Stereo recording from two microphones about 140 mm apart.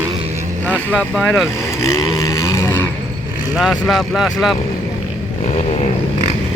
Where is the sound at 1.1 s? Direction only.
5° left (ahead or behind).